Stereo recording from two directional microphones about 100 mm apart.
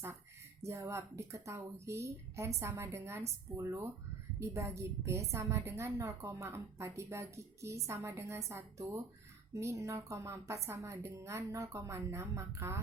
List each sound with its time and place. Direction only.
0.6 s a woman's voice: 30° right (ahead or behind)